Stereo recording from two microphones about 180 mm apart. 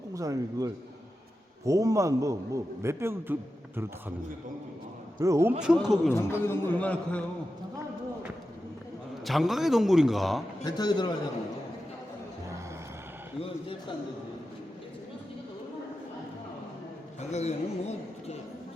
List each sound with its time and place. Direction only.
0.1 s a man's voice: 20° right (ahead or behind)
5.2 s a man's voice: 15° right (ahead or behind)
5.6 s a man's voice: 5° right (ahead or behind)
6.1 s a man's voice: 15° left (ahead or behind)
9.2 s a man's voice: centre (ahead or behind)
10.6 s a man's voice: 20° left (ahead or behind)
17.2 s speech: 40° left (ahead or behind)